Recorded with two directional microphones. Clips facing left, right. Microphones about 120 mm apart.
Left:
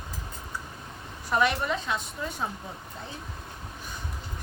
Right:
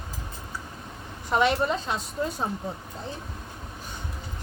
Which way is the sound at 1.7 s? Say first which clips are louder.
Right 1 dB; 35° right (ahead or behind).